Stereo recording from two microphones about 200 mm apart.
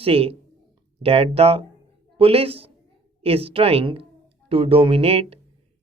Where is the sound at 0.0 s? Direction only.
30° right (ahead or behind).